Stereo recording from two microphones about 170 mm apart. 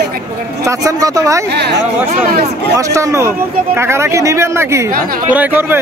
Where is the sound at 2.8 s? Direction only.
20° right (ahead or behind).